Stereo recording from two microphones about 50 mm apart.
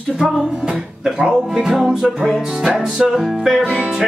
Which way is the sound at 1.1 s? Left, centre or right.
Centre.